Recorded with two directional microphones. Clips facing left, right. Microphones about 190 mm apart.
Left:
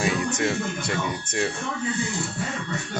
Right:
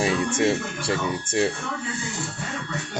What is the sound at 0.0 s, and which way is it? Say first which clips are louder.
Speech: right 3 dB; 30° right (ahead or behind).